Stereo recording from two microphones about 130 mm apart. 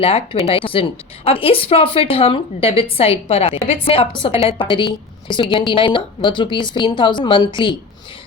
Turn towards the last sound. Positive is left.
turn(degrees=35)  # may be behind; listen again after turning